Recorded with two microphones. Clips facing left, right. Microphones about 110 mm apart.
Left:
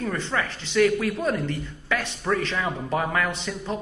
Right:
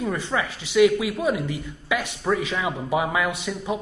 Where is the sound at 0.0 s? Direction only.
10° right (ahead or behind).